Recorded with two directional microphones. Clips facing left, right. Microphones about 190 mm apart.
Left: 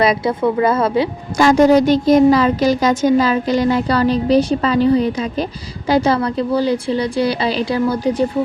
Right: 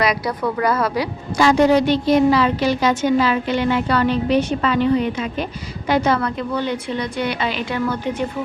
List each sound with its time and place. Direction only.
0.0 s a woman's voice: 25° left (ahead or behind)
1.4 s a woman's voice: 45° left (ahead or behind)